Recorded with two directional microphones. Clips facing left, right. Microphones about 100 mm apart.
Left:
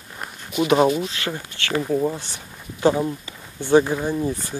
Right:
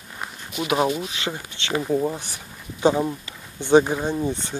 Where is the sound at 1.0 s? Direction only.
15° right (ahead or behind).